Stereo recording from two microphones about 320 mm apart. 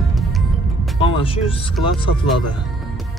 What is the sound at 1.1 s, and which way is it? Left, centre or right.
Speech, centre.